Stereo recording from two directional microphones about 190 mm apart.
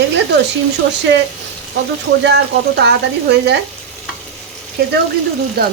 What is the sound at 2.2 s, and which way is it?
Speech, 65° right (ahead or behind).